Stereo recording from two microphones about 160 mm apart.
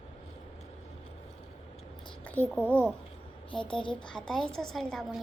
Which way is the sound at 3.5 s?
30° left (ahead or behind).